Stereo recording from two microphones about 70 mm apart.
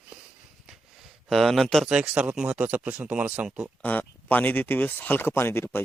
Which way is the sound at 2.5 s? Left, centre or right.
Right.